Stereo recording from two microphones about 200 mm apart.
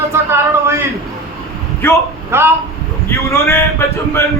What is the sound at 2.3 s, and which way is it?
Speech, 10° right (ahead or behind).